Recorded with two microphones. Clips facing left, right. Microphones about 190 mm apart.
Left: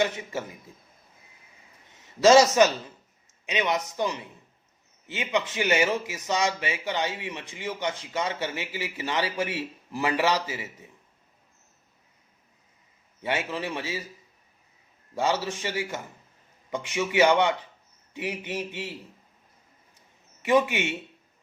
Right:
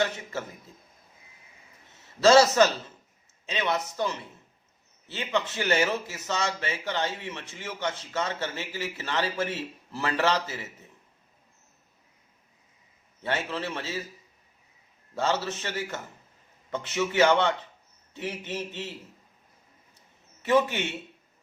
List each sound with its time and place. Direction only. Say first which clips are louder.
0.0 s speech: left 2 dB; 15° left (ahead or behind)
2.2 s speech: left 1 dB; 15° left (ahead or behind)
13.2 s speech: left 1 dB; 15° left (ahead or behind)
15.1 s speech: left 1 dB; 10° left (ahead or behind)
20.4 s speech: left 1 dB; 10° left (ahead or behind)